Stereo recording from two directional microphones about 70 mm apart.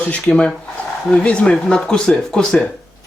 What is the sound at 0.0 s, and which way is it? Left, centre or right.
Speech, centre.